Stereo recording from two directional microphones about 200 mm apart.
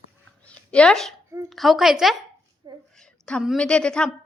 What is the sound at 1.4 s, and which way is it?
A woman's voice, centre (ahead or behind).